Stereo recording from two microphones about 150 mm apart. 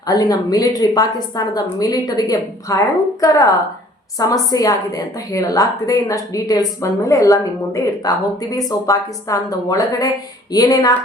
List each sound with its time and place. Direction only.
0.1 s a woman's voice: 25° left (ahead or behind)